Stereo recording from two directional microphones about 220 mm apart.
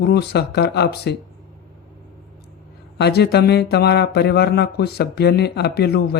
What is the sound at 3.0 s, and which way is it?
Speech, 45° left (ahead or behind).